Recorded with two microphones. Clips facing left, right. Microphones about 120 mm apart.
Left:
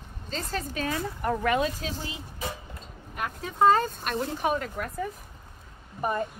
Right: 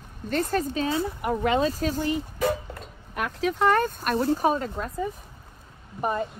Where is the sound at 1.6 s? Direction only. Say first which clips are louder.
Right 5 dB; 40° right (ahead or behind).